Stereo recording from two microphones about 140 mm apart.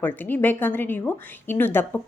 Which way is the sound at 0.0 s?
15° left (ahead or behind).